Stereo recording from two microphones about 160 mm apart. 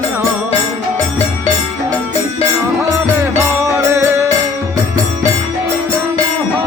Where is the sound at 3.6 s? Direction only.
20° right (ahead or behind).